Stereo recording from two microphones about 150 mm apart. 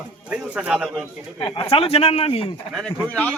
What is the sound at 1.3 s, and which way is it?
Speech, 35° left (ahead or behind).